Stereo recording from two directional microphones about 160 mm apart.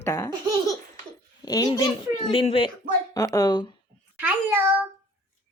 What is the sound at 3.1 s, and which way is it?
Speech, 25° left (ahead or behind).